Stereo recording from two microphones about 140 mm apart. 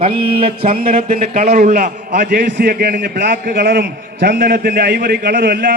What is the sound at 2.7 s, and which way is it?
A man's voice, 90° right.